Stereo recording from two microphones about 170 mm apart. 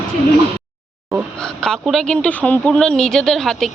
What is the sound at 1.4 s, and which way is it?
A woman's voice, centre (ahead or behind).